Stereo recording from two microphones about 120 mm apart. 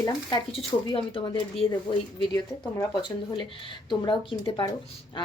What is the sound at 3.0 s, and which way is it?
A woman's voice, 40° left (ahead or behind).